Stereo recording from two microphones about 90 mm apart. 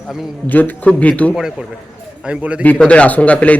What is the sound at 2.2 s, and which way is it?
Speech, 15° right (ahead or behind).